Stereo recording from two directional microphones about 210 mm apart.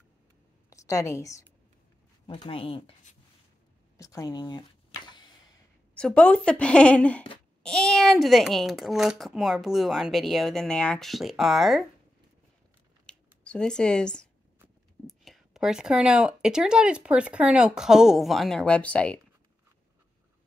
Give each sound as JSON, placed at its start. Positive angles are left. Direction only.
{"t": 0.7, "sound": "a woman's voice", "side_deg": 15}
{"t": 2.2, "sound": "speech", "side_deg": 25}
{"t": 5.9, "sound": "a child's voice", "side_deg": 5}
{"t": 13.0, "sound": "a sound", "side_deg": 5}
{"t": 15.0, "sound": "a child's voice", "side_deg": 0}